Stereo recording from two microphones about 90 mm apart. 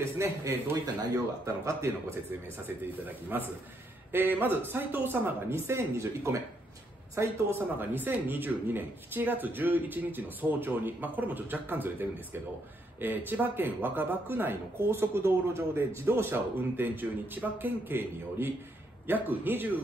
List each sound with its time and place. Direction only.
0.0 s speech: 30° right (ahead or behind)
0.7 s speech: 45° right (ahead or behind); by 19.8 s 20° right (ahead or behind)